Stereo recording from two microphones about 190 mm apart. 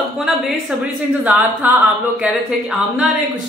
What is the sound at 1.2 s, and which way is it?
Speech, 5° right (ahead or behind).